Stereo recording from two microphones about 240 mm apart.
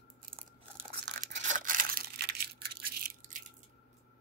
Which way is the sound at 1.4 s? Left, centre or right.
Right.